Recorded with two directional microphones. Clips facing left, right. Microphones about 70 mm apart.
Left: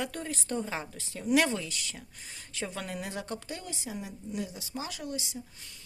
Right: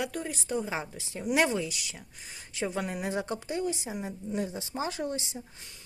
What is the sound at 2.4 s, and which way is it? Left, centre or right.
Speech, centre.